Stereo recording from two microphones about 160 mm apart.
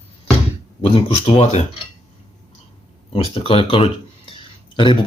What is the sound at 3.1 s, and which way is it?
Speech, 35° left (ahead or behind).